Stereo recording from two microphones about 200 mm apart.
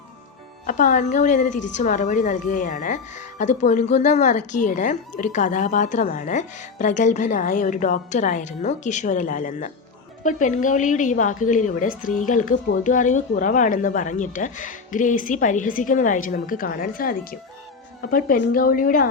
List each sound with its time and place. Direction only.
0.7 s a woman's voice: 40° left (ahead or behind)